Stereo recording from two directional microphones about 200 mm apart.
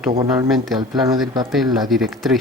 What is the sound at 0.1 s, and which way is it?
Speech, 20° right (ahead or behind).